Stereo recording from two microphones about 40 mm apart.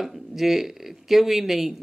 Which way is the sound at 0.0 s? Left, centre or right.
Centre.